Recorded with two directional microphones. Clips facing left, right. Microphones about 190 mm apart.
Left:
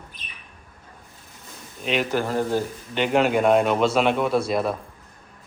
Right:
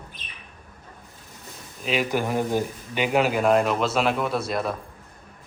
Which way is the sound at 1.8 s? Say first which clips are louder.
Left 1 dB; 5° right (ahead or behind).